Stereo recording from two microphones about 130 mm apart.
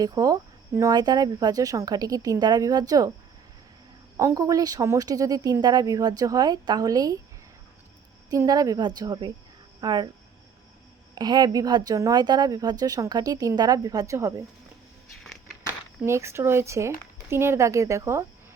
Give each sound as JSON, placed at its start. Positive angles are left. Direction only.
{"t": 0.0, "sound": "a woman's voice", "side_deg": -30}
{"t": 4.2, "sound": "a woman's voice", "side_deg": -25}
{"t": 8.3, "sound": "a woman's voice", "side_deg": -30}
{"t": 11.1, "sound": "a woman's voice", "side_deg": -30}
{"t": 15.2, "sound": "a sound", "side_deg": 0}
{"t": 16.0, "sound": "a woman's voice", "side_deg": -20}